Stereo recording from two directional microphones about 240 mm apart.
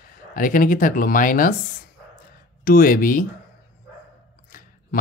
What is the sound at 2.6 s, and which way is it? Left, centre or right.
Speech, left.